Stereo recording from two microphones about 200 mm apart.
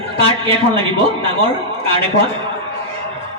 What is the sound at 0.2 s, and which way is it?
A man's voice, 25° right (ahead or behind).